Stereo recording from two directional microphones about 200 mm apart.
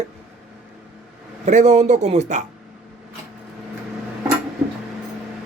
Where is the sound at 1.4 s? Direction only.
35° right (ahead or behind).